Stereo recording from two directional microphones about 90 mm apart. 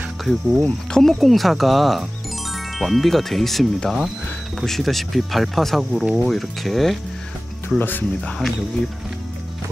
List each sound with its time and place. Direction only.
0.2 s speech: centre (ahead or behind)
7.8 s speech: 20° left (ahead or behind)